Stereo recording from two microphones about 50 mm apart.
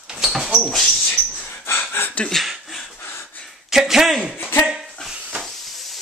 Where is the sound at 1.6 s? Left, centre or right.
Left.